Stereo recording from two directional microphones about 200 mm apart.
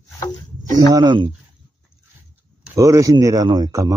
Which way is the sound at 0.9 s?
25° right (ahead or behind).